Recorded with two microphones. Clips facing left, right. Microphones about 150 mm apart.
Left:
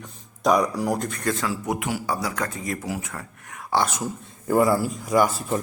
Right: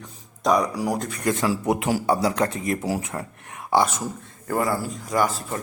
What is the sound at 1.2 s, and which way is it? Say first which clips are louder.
Speech: right 3 dB; 15° right (ahead or behind).